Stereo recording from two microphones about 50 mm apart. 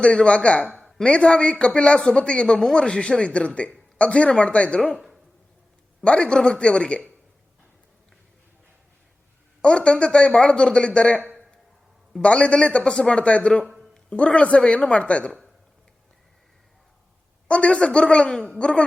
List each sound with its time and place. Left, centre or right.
0.0 s speech: left
0.8 s a sound: centre
1.0 s speech: left
6.1 s speech: centre
9.6 s speech: left
12.2 s speech: left
17.5 s speech: left